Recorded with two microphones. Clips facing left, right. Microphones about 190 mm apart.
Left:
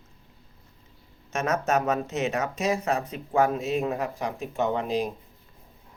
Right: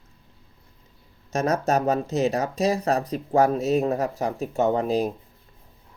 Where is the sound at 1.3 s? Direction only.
35° right (ahead or behind).